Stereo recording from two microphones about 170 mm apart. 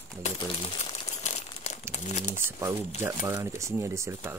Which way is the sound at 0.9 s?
40° left (ahead or behind).